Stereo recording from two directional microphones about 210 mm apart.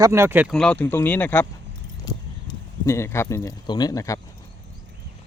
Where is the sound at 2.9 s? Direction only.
15° left (ahead or behind).